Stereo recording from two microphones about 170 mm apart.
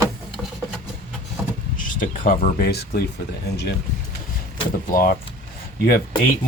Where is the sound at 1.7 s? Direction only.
50° left (ahead or behind); by 3.0 s 70° left (ahead or behind).